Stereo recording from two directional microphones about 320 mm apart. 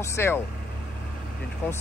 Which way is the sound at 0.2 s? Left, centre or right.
Centre.